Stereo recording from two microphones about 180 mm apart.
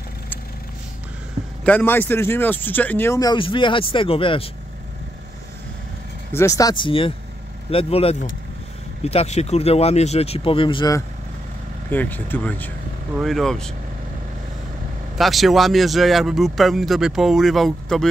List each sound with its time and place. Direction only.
1.6 s speech: 5° left (ahead or behind); by 4.5 s 30° left (ahead or behind)
6.3 s speech: 20° left (ahead or behind)
11.9 s speech: 10° left (ahead or behind)
15.1 s speech: centre (ahead or behind)